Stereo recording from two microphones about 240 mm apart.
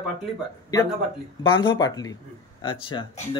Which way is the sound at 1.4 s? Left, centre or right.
Centre.